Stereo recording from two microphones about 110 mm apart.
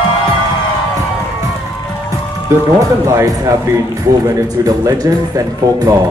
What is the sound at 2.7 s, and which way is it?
Speech, 30° right (ahead or behind).